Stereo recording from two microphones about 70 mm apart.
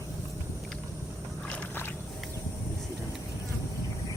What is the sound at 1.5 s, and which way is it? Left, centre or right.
Boat, left.